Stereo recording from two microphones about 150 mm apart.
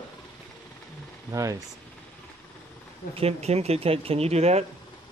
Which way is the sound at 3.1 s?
45° right (ahead or behind).